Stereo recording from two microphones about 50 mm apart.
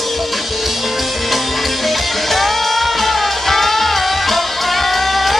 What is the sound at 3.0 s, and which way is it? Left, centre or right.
Music, centre.